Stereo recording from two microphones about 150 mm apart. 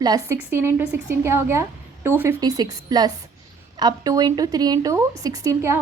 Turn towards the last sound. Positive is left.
turn(degrees=-20)  # may be behind; listen again after turning